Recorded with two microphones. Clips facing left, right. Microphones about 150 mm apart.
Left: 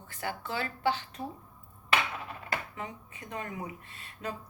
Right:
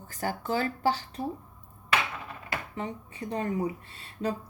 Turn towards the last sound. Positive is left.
turn(degrees=-30)  # may be behind; listen again after turning